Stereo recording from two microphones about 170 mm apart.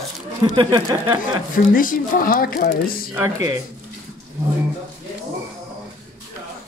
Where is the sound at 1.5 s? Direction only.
55° left (ahead or behind).